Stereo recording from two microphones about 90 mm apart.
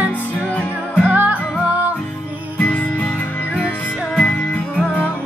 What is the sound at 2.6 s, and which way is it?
Music, 15° left (ahead or behind).